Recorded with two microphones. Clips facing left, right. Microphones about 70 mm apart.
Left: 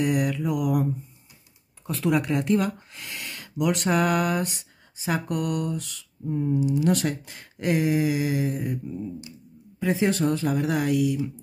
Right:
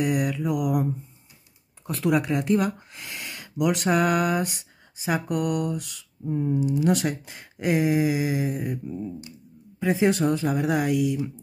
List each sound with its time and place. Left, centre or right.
0.0 s speech: centre
1.9 s speech: centre
9.8 s speech: centre